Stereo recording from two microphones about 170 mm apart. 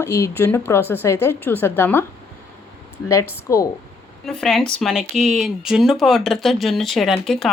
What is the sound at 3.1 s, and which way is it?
Speech, 15° left (ahead or behind).